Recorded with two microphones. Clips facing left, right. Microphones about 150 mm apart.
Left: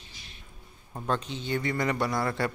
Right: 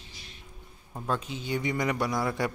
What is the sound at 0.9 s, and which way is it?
Speech, centre (ahead or behind).